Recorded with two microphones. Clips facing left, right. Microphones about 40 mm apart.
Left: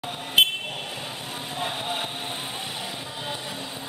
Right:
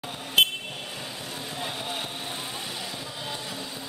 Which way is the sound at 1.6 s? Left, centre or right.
Left.